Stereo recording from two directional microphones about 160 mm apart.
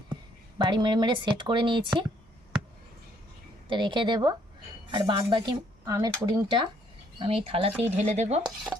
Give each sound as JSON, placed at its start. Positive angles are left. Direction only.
{"t": 0.6, "sound": "speech", "side_deg": -30}
{"t": 3.7, "sound": "speech", "side_deg": -30}
{"t": 7.2, "sound": "speech", "side_deg": -35}
{"t": 8.7, "sound": "filing", "side_deg": -10}